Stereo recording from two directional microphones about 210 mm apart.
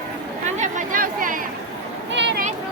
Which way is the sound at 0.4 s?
35° right (ahead or behind).